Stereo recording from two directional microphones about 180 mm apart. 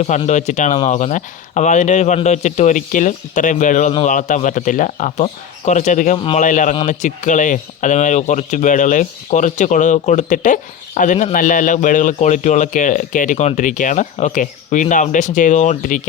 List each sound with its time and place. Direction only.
0.3 s speech: 40° left (ahead or behind)
6.1 s a man's voice: 30° left (ahead or behind)
6.4 s speech: 45° left (ahead or behind)